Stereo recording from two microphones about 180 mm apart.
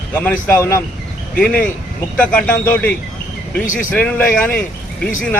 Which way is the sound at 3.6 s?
45° left (ahead or behind).